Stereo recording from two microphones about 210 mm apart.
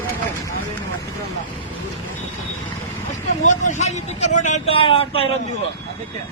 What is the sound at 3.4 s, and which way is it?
Speech, 35° left (ahead or behind).